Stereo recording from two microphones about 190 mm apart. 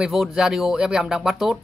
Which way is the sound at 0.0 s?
5° right (ahead or behind).